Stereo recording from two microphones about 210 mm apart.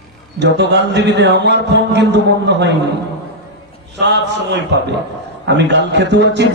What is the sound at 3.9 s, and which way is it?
A man's voice, 55° right (ahead or behind).